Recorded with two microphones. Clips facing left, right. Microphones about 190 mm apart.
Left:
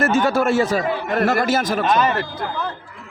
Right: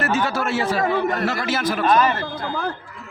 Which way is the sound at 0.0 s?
50° left (ahead or behind).